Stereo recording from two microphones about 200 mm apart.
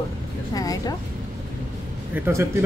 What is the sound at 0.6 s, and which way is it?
Music, 20° left (ahead or behind).